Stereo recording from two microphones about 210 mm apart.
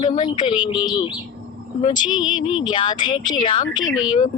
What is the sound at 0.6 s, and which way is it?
Speech, 20° left (ahead or behind).